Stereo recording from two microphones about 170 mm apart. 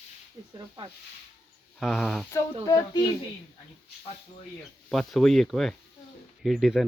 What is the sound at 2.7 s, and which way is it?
Speech, 20° left (ahead or behind).